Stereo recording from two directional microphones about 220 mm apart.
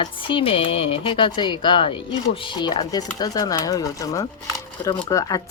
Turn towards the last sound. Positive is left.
turn(degrees=15)  # may be behind; listen again after turning